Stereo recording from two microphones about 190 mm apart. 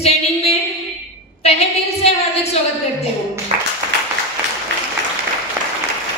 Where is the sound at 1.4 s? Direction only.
35° left (ahead or behind).